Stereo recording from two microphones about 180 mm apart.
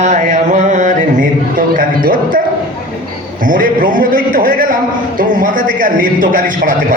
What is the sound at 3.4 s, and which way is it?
A man's voice, 50° right (ahead or behind).